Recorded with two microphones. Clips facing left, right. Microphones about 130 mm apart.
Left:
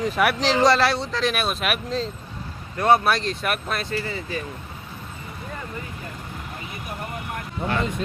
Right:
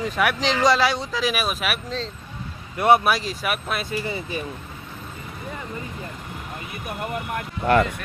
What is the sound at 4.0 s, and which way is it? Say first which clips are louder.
Speech: right 1 dB; 20° right (ahead or behind).